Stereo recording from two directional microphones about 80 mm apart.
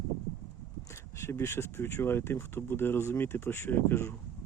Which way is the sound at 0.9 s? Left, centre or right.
Left.